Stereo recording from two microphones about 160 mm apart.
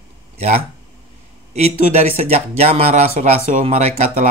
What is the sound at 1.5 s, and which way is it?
Speech, 40° right (ahead or behind).